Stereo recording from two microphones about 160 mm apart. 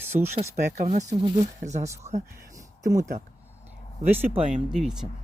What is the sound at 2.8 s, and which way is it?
Speech, 20° right (ahead or behind).